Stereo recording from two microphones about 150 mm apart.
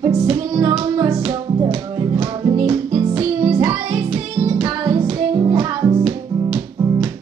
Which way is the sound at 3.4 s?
35° right (ahead or behind).